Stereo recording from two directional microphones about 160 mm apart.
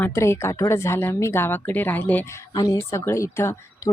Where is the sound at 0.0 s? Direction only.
15° left (ahead or behind).